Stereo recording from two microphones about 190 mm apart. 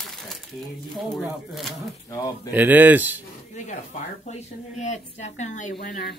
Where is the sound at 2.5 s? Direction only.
10° right (ahead or behind).